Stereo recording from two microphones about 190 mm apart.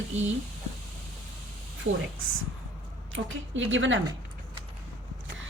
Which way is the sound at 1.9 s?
90° right.